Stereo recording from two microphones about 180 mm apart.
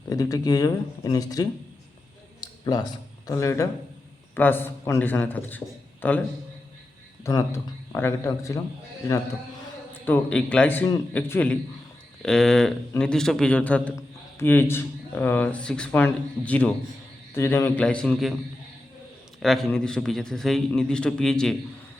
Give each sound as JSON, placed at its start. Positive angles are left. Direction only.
{"t": 0.1, "sound": "speech", "side_deg": 20}
{"t": 2.4, "sound": "a sound", "side_deg": 20}
{"t": 3.2, "sound": "a man's voice", "side_deg": 15}
{"t": 7.3, "sound": "a man's voice", "side_deg": 15}
{"t": 10.1, "sound": "a man's voice", "side_deg": 5}
{"t": 19.4, "sound": "a man's voice", "side_deg": 0}